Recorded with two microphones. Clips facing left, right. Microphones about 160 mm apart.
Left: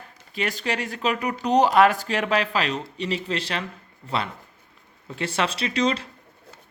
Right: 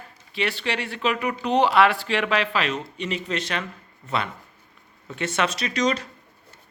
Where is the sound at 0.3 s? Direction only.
45° left (ahead or behind).